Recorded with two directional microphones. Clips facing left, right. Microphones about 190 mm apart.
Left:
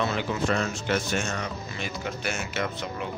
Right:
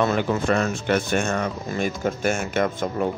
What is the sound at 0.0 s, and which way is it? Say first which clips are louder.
Speech: right 6 dB; 50° right (ahead or behind).